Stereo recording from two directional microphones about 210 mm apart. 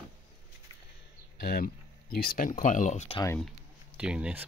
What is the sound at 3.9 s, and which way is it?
Speech, 5° right (ahead or behind).